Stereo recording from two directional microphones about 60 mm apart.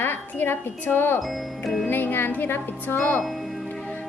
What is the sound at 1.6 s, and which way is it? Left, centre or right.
Speech, centre.